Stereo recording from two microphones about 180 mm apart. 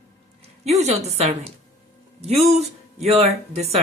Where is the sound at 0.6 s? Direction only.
35° right (ahead or behind).